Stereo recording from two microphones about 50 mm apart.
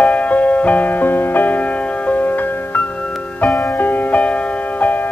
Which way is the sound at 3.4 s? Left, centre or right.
Left.